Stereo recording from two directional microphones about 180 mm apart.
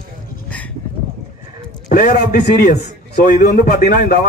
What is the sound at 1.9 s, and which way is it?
A man's voice, 50° left (ahead or behind).